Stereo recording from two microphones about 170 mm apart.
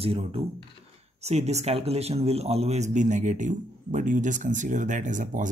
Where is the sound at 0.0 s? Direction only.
35° right (ahead or behind).